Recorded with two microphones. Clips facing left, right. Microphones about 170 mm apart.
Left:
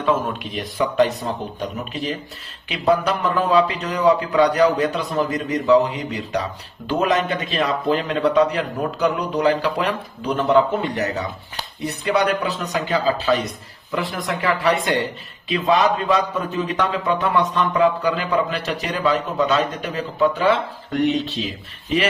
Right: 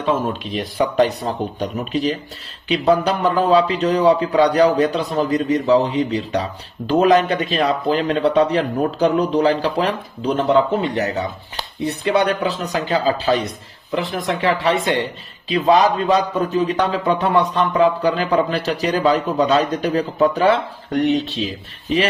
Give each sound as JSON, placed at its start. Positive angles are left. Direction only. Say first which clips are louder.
{"t": 0.8, "sound": "a man's voice", "louder": "right 1 dB", "side_deg": -40}
{"t": 2.6, "sound": "a man's voice", "louder": "right 3 dB", "side_deg": -30}
{"t": 15.4, "sound": "a man's voice", "louder": "right 3 dB", "side_deg": -35}